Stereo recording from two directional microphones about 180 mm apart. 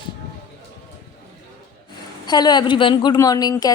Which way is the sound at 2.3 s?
25° left (ahead or behind).